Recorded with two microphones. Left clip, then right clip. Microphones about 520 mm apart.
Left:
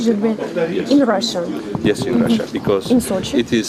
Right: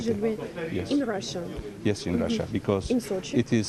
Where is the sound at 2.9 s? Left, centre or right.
Centre.